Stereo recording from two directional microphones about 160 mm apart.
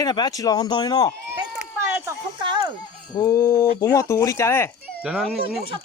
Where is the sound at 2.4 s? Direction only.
30° right (ahead or behind).